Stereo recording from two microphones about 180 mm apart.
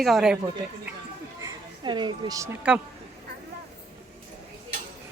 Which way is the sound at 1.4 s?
25° right (ahead or behind).